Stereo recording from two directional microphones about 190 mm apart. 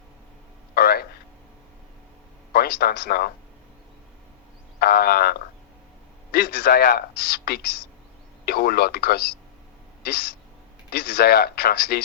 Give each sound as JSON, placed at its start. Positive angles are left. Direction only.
{"t": 0.7, "sound": "a sound", "side_deg": 55}
{"t": 2.5, "sound": "speech", "side_deg": 55}
{"t": 4.8, "sound": "frog", "side_deg": 55}
{"t": 6.3, "sound": "speech", "side_deg": 55}
{"t": 10.9, "sound": "speech", "side_deg": 55}